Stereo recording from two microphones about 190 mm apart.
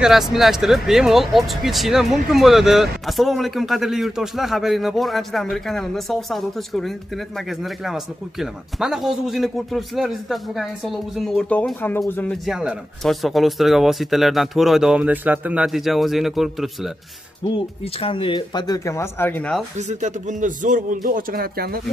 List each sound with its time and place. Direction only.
0.0 s speech: centre (ahead or behind)
17.6 s speech: 30° left (ahead or behind); by 19.6 s 10° left (ahead or behind)
19.9 s a man's voice: 40° right (ahead or behind)